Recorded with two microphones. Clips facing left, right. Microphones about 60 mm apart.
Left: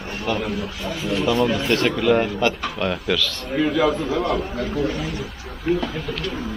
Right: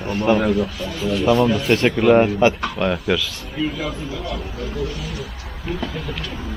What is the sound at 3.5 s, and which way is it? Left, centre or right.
Speech, left.